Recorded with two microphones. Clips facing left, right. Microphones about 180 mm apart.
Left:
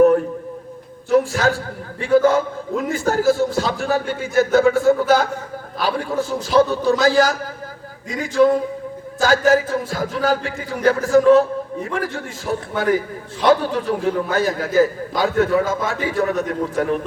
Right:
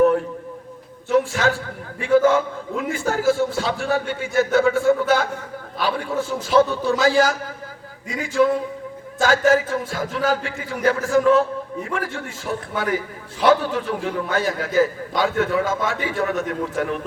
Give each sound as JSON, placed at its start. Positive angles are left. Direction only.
{"t": 1.1, "sound": "a man's voice", "side_deg": 40}